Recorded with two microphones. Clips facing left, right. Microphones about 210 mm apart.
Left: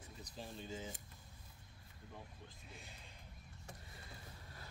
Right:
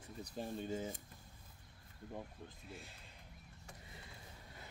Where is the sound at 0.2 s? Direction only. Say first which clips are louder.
Right 7 dB; 50° right (ahead or behind).